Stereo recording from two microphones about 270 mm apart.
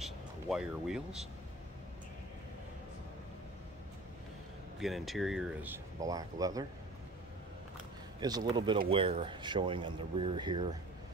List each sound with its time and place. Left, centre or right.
0.0 s speech: centre
4.7 s speech: centre
8.2 s speech: centre